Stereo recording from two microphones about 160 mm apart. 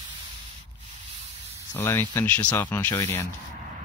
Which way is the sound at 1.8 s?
15° left (ahead or behind).